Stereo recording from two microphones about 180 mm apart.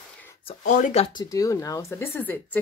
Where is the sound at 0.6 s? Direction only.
45° left (ahead or behind).